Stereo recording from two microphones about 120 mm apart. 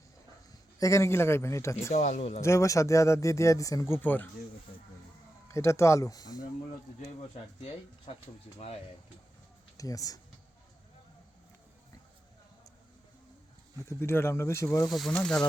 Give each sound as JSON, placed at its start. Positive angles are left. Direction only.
{"t": 0.8, "sound": "speech", "side_deg": 25}
{"t": 1.9, "sound": "speech", "side_deg": 75}
{"t": 2.4, "sound": "speech", "side_deg": 25}
{"t": 5.5, "sound": "speech", "side_deg": 25}
{"t": 8.1, "sound": "speech", "side_deg": 55}
{"t": 9.7, "sound": "speech", "side_deg": 30}
{"t": 13.8, "sound": "speech", "side_deg": 20}
{"t": 14.8, "sound": "speech", "side_deg": 0}